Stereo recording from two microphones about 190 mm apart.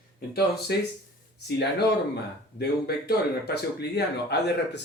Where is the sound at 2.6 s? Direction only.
55° left (ahead or behind).